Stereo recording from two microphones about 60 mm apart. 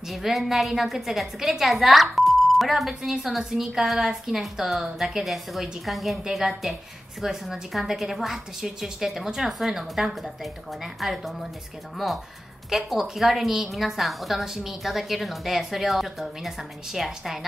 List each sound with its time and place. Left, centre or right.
0.1 s a woman's voice: centre
12.6 s a woman's voice: centre